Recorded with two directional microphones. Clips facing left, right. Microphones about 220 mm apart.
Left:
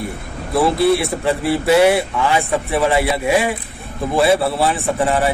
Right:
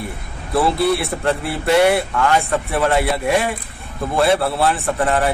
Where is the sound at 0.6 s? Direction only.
Centre (ahead or behind).